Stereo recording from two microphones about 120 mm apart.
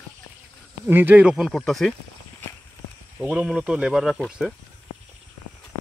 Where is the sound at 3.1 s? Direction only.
10° right (ahead or behind).